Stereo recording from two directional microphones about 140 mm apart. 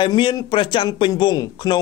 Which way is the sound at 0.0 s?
35° left (ahead or behind).